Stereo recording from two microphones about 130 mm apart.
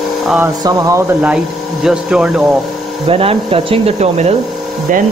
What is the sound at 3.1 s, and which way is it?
Speech, 50° right (ahead or behind).